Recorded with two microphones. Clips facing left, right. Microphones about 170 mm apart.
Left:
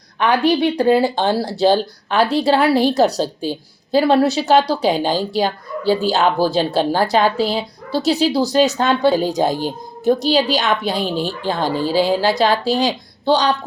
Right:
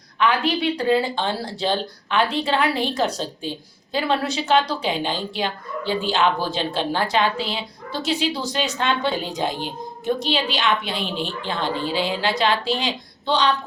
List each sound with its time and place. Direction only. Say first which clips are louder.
0.8 s a woman's voice: left 6 dB; 40° left (ahead or behind)